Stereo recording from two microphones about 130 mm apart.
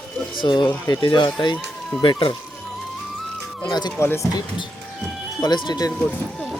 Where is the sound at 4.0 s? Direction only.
20° left (ahead or behind).